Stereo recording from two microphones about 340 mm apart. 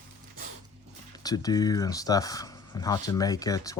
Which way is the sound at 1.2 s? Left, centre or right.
Centre.